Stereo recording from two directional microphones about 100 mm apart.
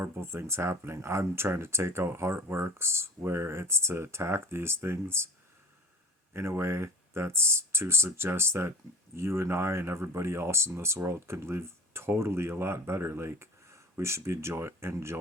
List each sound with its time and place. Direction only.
0.0 s speech: 25° right (ahead or behind)
6.3 s speech: 25° right (ahead or behind)